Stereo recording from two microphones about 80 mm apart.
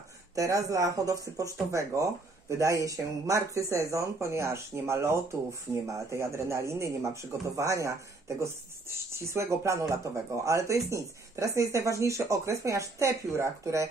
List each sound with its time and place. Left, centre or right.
0.4 s speech: right